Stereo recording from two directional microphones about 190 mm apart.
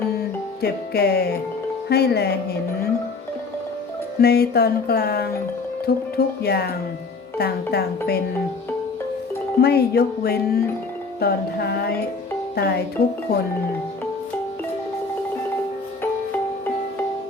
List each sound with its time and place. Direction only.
0.6 s music: 55° left (ahead or behind)
4.2 s music: 55° left (ahead or behind)
9.6 s music: 55° left (ahead or behind)